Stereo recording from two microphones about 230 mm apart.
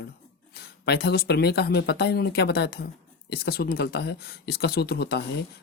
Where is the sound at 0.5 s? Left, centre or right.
Left.